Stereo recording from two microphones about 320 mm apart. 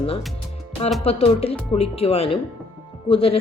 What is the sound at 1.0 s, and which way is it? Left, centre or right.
Speech, centre.